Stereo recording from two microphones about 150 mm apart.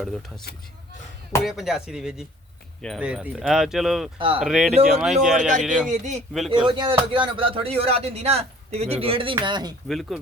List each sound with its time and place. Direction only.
0.0 s speech: centre (ahead or behind)
1.5 s speech: centre (ahead or behind)
5.9 s speech: 50° right (ahead or behind)
6.5 s speech: 35° right (ahead or behind)
9.9 s speech: centre (ahead or behind)